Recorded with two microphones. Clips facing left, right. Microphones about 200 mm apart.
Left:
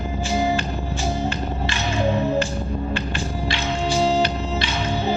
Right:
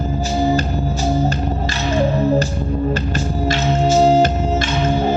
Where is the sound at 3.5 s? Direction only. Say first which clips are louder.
Right 8 dB; 45° right (ahead or behind).